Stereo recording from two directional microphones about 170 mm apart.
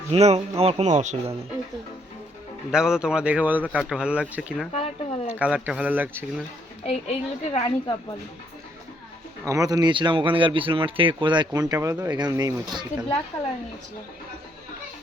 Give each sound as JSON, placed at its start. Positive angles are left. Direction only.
{"t": 0.1, "sound": "speech", "side_deg": -40}
{"t": 2.7, "sound": "speech", "side_deg": -5}
{"t": 4.7, "sound": "a sound", "side_deg": 35}
{"t": 5.3, "sound": "speech", "side_deg": -5}
{"t": 6.8, "sound": "a woman's voice", "side_deg": 35}
{"t": 9.4, "sound": "speech", "side_deg": -20}